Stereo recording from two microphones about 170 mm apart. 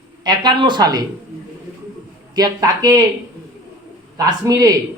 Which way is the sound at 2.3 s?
20° right (ahead or behind).